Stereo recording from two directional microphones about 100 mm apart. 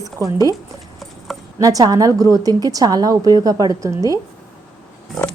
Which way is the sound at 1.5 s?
35° right (ahead or behind).